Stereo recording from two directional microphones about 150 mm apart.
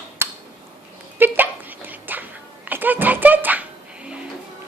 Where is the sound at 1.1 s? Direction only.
15° right (ahead or behind).